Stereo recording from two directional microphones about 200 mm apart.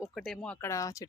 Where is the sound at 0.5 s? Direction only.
15° left (ahead or behind).